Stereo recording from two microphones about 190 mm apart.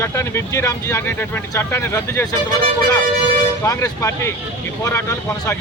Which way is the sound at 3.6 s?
15° left (ahead or behind).